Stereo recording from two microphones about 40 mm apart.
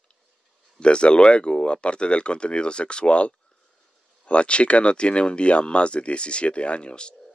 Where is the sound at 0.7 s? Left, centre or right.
Left.